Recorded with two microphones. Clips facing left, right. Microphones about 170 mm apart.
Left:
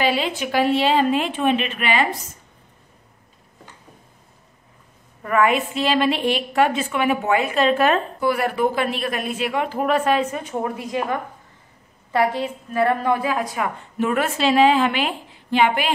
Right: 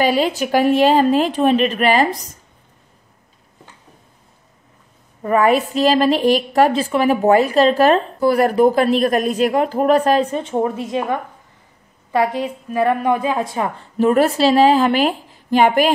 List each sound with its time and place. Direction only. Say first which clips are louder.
0.0 s a woman's voice: right 5 dB; 40° right (ahead or behind)
5.2 s a woman's voice: right 4 dB; 35° right (ahead or behind)